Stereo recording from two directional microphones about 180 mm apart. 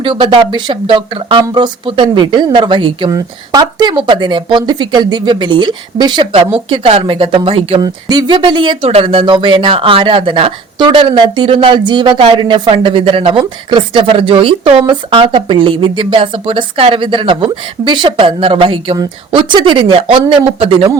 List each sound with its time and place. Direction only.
0.0 s speech: 30° right (ahead or behind)